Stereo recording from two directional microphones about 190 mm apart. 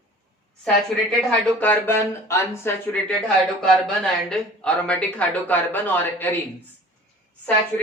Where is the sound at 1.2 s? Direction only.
5° left (ahead or behind).